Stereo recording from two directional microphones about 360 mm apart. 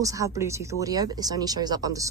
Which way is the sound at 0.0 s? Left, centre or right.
Centre.